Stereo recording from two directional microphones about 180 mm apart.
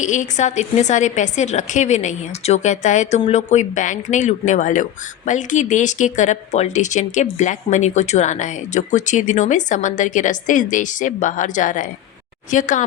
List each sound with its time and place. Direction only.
0.0 s a woman's voice: 40° left (ahead or behind)